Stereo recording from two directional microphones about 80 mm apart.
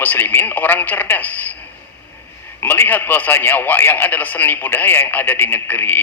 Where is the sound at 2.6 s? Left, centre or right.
Left.